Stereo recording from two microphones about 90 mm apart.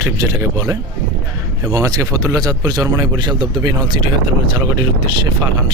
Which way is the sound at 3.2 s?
60° right (ahead or behind).